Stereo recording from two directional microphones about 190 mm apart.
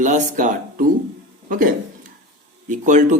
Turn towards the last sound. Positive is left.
turn(degrees=-40)  # may be behind; listen again after turning